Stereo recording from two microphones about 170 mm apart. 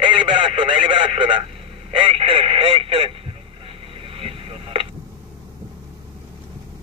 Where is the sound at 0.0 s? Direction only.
30° right (ahead or behind).